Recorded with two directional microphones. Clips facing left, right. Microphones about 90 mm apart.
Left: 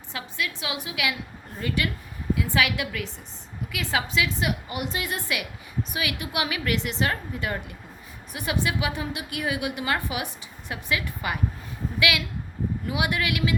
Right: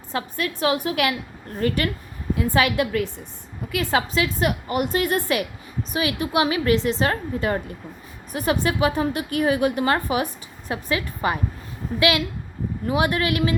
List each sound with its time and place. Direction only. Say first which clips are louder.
0.1 s a woman's voice: right 5 dB; 40° right (ahead or behind)
2.3 s a woman's voice: right 4 dB; 40° right (ahead or behind)
5.9 s a woman's voice: right 9 dB; 35° right (ahead or behind)